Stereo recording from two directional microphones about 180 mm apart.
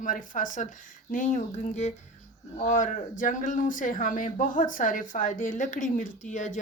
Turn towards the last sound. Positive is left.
turn(degrees=45)  # may be behind; listen again after turning